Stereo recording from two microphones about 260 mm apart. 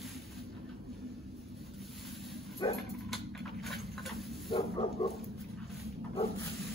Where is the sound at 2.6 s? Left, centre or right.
Centre.